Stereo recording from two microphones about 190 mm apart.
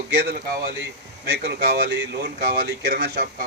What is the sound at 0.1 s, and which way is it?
Speech, 60° right (ahead or behind).